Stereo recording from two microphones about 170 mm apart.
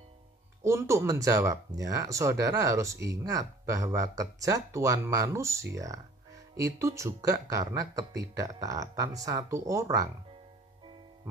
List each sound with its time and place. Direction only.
0.7 s speech: 15° right (ahead or behind)